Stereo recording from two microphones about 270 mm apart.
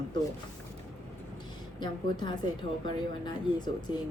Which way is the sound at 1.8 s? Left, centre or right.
Centre.